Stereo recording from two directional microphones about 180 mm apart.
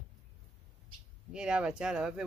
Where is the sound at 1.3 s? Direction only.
5° right (ahead or behind).